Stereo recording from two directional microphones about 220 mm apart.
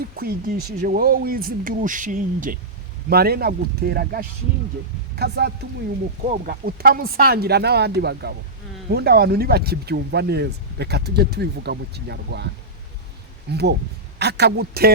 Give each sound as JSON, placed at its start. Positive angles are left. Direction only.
{"t": 0.2, "sound": "speech", "side_deg": -40}
{"t": 13.5, "sound": "speech", "side_deg": -50}